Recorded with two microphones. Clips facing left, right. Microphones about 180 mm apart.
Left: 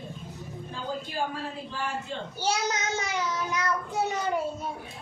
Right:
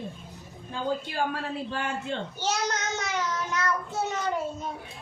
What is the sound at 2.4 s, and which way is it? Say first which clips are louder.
A child's voice: left 2 dB; 10° left (ahead or behind).